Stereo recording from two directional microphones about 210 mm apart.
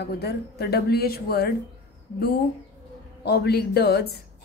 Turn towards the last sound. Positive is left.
turn(degrees=50)  # may be behind; listen again after turning